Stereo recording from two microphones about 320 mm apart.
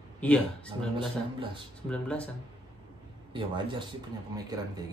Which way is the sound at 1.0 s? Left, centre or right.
Centre.